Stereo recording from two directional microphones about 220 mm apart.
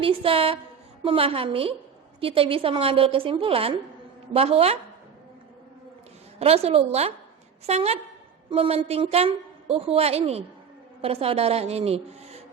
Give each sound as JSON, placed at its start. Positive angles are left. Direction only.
{"t": 0.0, "sound": "a woman's voice", "side_deg": -25}
{"t": 6.4, "sound": "a woman's voice", "side_deg": -30}